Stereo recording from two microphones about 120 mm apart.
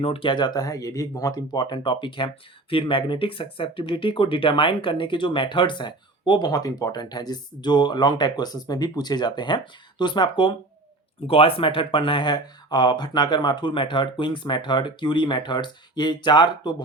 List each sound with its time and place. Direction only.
0.0 s speech: 50° left (ahead or behind)